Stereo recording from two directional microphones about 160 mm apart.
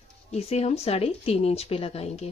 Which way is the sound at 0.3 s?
40° left (ahead or behind).